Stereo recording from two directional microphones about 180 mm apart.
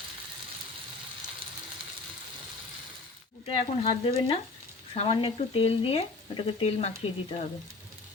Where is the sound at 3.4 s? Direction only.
30° left (ahead or behind).